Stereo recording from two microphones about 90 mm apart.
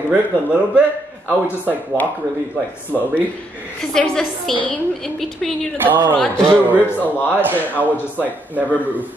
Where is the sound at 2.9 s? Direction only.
15° right (ahead or behind).